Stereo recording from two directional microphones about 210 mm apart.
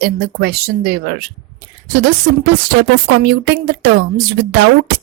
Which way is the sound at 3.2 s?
50° right (ahead or behind).